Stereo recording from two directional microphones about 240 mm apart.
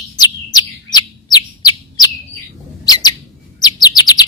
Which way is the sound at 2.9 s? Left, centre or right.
Centre.